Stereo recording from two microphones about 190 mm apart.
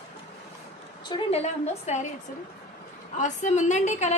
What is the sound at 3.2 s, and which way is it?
Speech, 40° left (ahead or behind).